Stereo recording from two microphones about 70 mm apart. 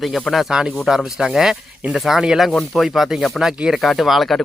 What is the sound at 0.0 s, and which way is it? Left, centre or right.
Speech, centre.